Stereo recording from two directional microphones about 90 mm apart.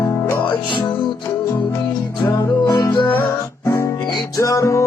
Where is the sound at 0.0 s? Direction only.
30° left (ahead or behind).